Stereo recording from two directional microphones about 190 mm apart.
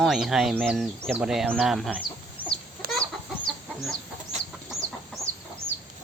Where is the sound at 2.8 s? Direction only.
55° right (ahead or behind).